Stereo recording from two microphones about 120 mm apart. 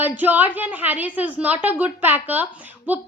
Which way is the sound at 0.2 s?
15° right (ahead or behind).